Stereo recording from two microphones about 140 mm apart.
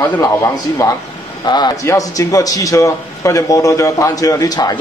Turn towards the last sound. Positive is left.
turn(degrees=30)  # may be behind; listen again after turning